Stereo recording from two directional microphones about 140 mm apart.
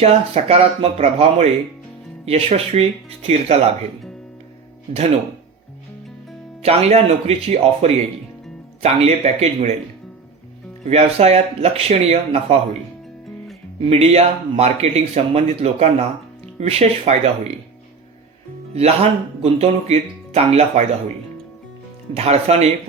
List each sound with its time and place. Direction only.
0.0 s speech: 50° right (ahead or behind)
6.6 s speech: 50° right (ahead or behind)
10.8 s speech: 50° right (ahead or behind)
13.9 s speech: 50° right (ahead or behind)
18.7 s speech: 50° right (ahead or behind)
22.1 s speech: 50° right (ahead or behind)